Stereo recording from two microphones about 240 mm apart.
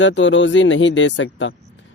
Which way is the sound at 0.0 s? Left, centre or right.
Left.